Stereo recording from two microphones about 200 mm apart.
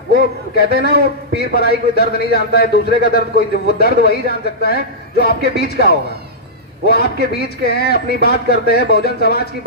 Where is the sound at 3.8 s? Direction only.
50° left (ahead or behind).